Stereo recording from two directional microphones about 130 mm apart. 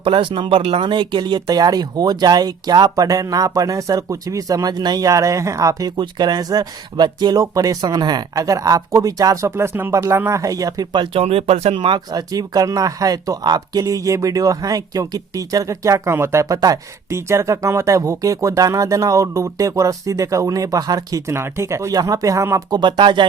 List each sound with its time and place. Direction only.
0.0 s speech: 40° right (ahead or behind); by 22.6 s 25° right (ahead or behind)
22.7 s speech: 35° right (ahead or behind)